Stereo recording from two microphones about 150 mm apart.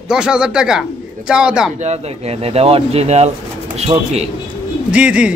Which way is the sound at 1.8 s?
45° right (ahead or behind).